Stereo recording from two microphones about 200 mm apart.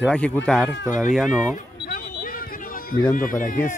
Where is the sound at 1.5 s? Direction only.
45° left (ahead or behind).